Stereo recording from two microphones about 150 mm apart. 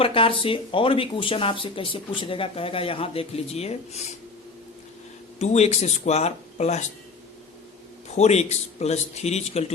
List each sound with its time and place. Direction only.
0.0 s speech: 35° left (ahead or behind)
5.4 s a man's voice: 50° left (ahead or behind)
8.0 s a man's voice: 45° left (ahead or behind)